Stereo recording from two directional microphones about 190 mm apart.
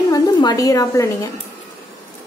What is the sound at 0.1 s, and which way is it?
A woman's voice, 20° left (ahead or behind).